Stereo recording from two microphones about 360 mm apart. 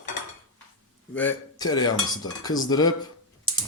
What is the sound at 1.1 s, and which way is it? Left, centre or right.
Cutlery, centre.